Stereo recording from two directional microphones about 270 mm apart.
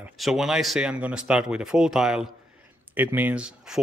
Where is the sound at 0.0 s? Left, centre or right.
Centre.